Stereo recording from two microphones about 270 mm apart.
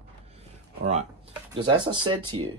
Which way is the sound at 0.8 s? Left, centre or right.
Right.